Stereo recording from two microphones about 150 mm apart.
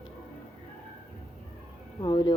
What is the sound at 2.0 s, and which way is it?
Speech, 25° left (ahead or behind).